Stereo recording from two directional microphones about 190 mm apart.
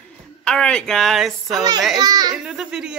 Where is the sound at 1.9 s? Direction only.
20° right (ahead or behind).